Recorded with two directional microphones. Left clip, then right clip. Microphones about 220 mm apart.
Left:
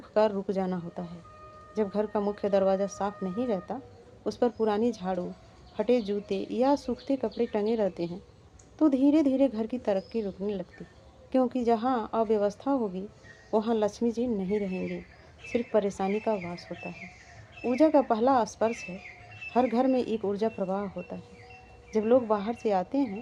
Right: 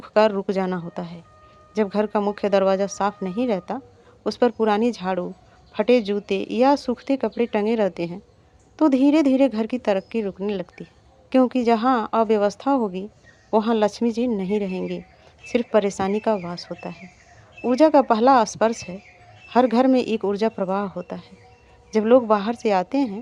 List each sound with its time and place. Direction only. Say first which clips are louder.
0.0 s speech: right 7 dB; 40° right (ahead or behind)